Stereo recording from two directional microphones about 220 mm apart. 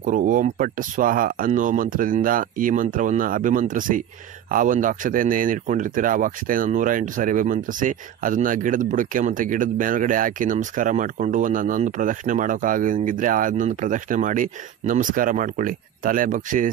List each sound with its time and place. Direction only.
0.0 s speech: 35° right (ahead or behind)